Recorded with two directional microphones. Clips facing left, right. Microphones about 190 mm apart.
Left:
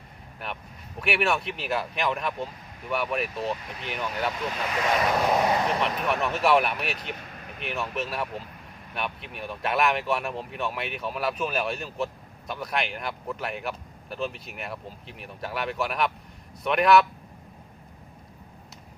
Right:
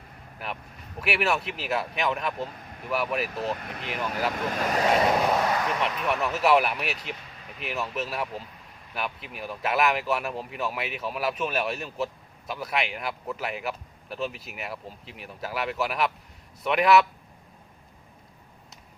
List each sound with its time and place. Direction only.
0.4 s speech: centre (ahead or behind)
4.4 s speech: 40° right (ahead or behind)
5.4 s speech: 25° left (ahead or behind)
6.1 s speech: 5° right (ahead or behind)